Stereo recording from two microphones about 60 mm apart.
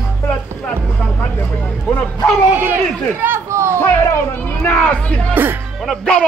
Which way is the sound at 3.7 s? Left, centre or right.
Left.